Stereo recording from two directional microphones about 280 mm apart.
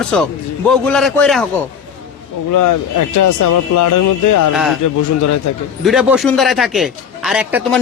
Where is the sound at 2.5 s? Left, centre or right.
Left.